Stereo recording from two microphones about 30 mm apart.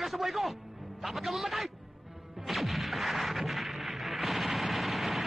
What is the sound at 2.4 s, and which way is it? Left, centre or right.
Artillery fire, centre.